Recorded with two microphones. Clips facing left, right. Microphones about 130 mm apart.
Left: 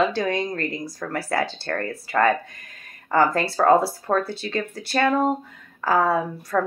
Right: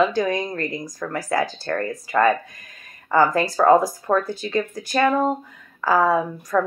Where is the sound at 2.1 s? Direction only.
40° right (ahead or behind).